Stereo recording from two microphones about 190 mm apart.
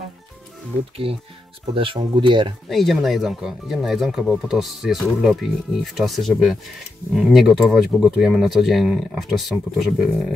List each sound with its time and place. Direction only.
1.0 s speech: 30° right (ahead or behind)
2.7 s speech: centre (ahead or behind)